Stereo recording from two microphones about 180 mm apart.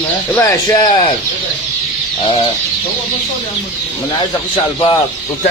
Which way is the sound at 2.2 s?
25° left (ahead or behind).